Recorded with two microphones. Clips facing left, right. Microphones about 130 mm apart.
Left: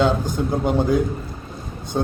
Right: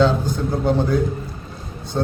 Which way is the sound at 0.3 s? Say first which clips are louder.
Even; 15° left (ahead or behind).